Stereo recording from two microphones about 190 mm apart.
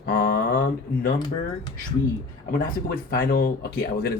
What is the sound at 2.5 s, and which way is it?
Speech, 50° left (ahead or behind).